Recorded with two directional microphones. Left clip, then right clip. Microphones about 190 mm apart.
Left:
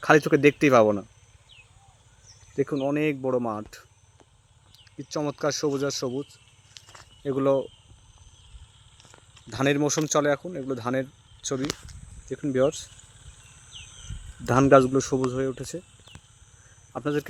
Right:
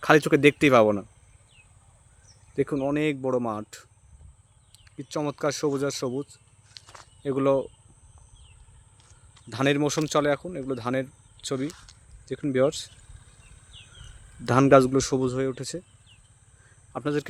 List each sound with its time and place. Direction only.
0.0 s speech: 5° right (ahead or behind)
2.6 s speech: 5° right (ahead or behind)
5.1 s speech: 5° right (ahead or behind)
6.7 s a sound: centre (ahead or behind)
9.5 s speech: 5° right (ahead or behind)
14.4 s a man's voice: 20° right (ahead or behind)
16.9 s speech: 15° right (ahead or behind)